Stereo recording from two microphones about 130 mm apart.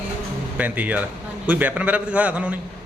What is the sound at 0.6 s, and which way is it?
Speech, 10° right (ahead or behind).